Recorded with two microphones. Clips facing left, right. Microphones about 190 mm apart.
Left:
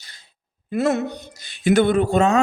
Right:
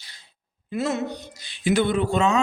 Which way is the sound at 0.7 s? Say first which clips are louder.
Left 5 dB; 55° left (ahead or behind).